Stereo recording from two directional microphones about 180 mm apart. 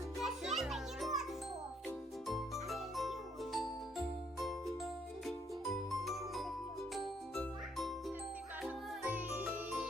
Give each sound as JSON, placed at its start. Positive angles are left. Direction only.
{"t": 0.2, "sound": "music", "side_deg": 0}
{"t": 2.2, "sound": "music", "side_deg": 0}
{"t": 5.7, "sound": "music", "side_deg": 0}
{"t": 6.9, "sound": "jingle", "side_deg": 0}
{"t": 8.6, "sound": "music", "side_deg": -10}